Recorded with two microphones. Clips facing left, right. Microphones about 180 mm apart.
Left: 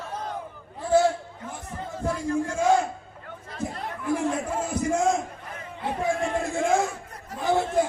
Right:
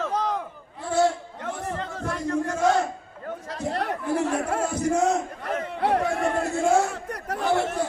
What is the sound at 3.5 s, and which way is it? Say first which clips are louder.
Chatter: right 4 dB; 75° right (ahead or behind).